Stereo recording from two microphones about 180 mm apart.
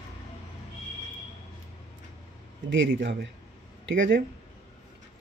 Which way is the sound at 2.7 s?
80° right.